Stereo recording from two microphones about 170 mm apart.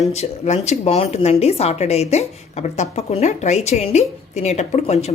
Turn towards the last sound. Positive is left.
turn(degrees=40)  # may be behind; listen again after turning